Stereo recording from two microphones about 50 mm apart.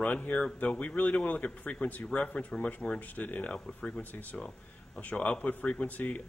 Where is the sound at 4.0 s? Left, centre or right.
Left.